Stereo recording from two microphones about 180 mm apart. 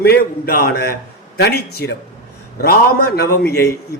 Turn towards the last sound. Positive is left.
turn(degrees=60)  # may be behind; listen again after turning